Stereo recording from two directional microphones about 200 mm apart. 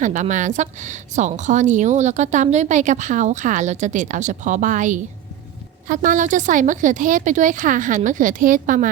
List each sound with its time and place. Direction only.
0.0 s a woman's voice: 40° right (ahead or behind)